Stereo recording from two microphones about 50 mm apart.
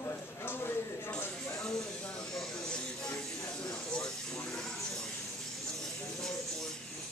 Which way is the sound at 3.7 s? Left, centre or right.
Centre.